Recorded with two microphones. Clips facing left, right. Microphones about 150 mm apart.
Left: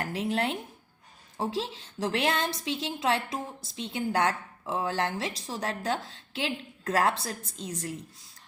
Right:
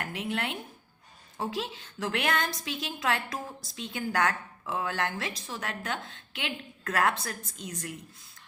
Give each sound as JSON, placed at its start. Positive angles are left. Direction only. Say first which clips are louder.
{"t": 0.0, "sound": "a woman's voice", "louder": "left 4 dB", "side_deg": 35}